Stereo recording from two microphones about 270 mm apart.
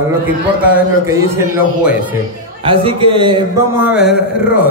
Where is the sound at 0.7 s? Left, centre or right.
Centre.